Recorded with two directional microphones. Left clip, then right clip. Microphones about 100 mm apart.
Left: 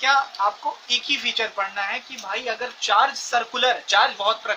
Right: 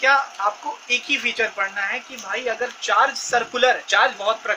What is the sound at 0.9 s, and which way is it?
Speech, 65° left (ahead or behind).